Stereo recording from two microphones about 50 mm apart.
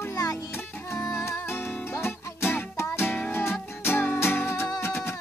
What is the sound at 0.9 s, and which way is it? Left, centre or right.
Music, left.